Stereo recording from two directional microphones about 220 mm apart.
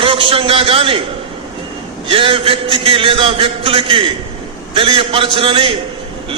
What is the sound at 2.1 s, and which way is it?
A man's voice, 25° right (ahead or behind).